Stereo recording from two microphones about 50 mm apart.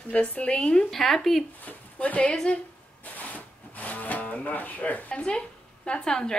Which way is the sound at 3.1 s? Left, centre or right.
Left.